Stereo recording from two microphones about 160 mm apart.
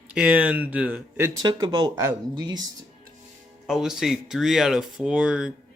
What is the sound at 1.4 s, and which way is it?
Speech, 25° right (ahead or behind).